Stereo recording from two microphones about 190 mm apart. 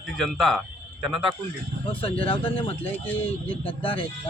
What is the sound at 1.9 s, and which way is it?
Speech, 30° left (ahead or behind).